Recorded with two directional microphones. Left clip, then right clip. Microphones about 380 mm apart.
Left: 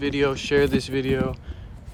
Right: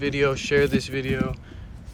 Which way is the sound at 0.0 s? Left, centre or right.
Centre.